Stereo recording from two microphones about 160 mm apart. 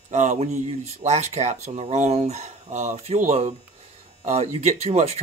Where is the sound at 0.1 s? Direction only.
50° right (ahead or behind).